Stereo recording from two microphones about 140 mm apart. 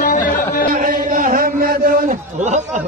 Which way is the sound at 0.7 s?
75° right (ahead or behind).